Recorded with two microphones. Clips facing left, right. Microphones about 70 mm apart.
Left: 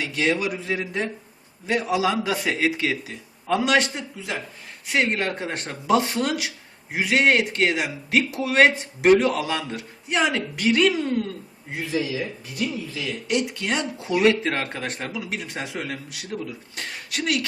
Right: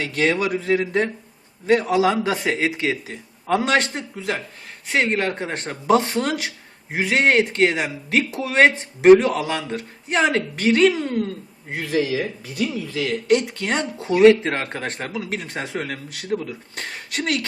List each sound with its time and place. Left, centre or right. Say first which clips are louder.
0.0 s speech: right 3 dB; right
4.9 s speech: right 2 dB; right
11.8 s speech: right 4 dB; right
13.7 s speech: right 3 dB; right